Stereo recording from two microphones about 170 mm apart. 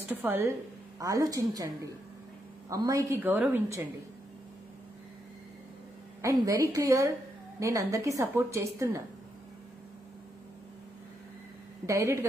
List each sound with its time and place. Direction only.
0.2 s a woman's voice: 10° right (ahead or behind)
6.2 s a woman's voice: 20° right (ahead or behind)
11.8 s a woman's voice: 15° right (ahead or behind)